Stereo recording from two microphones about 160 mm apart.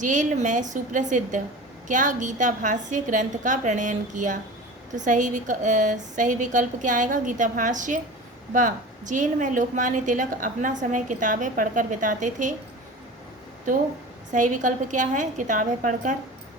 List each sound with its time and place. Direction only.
0.0 s a woman's voice: 50° right (ahead or behind)
14.3 s a woman's voice: 50° right (ahead or behind)